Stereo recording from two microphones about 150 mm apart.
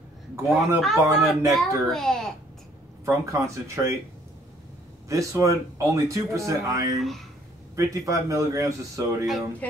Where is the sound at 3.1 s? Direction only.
20° right (ahead or behind).